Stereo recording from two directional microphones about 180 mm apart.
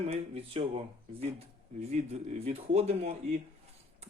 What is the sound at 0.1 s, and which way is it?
Speech, 30° right (ahead or behind).